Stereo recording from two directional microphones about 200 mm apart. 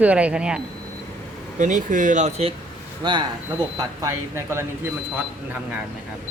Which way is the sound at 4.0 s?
15° right (ahead or behind).